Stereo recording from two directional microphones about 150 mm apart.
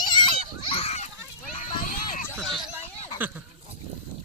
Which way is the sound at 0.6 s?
40° left (ahead or behind).